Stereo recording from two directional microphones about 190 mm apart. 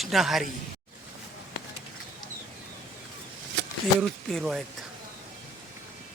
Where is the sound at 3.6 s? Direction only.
65° right (ahead or behind).